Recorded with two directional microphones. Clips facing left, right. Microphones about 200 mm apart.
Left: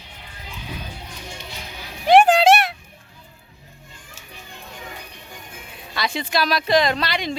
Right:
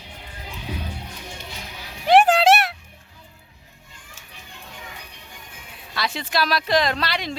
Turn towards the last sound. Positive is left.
turn(degrees=0)  # may be behind; listen again after turning